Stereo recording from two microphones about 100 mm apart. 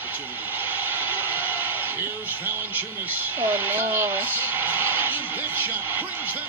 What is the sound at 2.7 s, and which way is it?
Speech, 20° right (ahead or behind).